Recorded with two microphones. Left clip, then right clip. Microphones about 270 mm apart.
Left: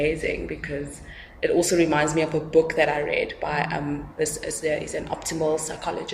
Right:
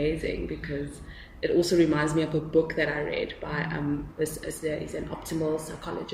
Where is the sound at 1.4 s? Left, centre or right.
Left.